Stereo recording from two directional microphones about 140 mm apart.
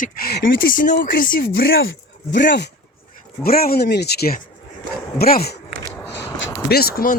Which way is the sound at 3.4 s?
90° left.